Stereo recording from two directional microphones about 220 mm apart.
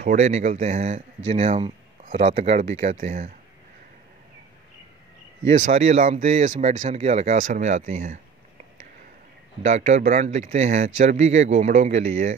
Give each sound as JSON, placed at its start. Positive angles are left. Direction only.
{"t": 0.0, "sound": "speech", "side_deg": -30}
{"t": 5.7, "sound": "speech", "side_deg": -30}
{"t": 9.6, "sound": "speech", "side_deg": -30}